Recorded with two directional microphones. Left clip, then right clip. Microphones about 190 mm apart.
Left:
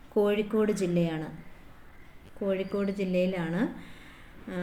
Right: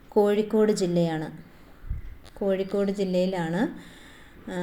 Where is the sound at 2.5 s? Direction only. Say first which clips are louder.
Right 4 dB; 20° right (ahead or behind).